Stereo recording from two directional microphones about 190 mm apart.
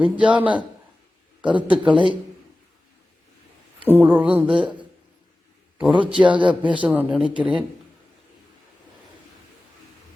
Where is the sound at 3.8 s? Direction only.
10° right (ahead or behind).